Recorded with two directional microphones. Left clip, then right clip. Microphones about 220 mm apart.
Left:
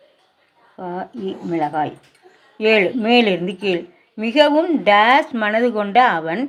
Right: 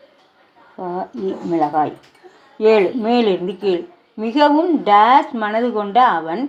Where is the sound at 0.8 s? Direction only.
15° left (ahead or behind).